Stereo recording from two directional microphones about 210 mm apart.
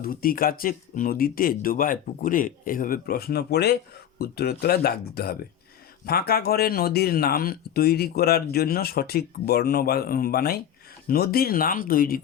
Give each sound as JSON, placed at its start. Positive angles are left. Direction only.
{"t": 0.0, "sound": "speech", "side_deg": 45}